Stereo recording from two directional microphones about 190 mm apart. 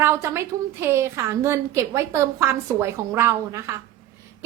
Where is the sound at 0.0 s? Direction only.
15° right (ahead or behind).